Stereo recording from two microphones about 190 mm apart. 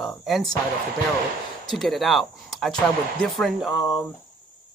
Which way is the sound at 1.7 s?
Centre (ahead or behind).